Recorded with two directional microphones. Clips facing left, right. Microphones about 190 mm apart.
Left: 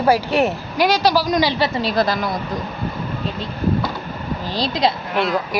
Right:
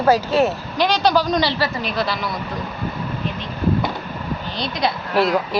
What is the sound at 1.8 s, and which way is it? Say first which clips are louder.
Speech: left 4 dB; 35° left (ahead or behind).